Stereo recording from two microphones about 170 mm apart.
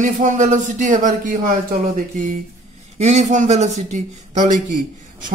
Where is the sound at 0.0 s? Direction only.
45° right (ahead or behind).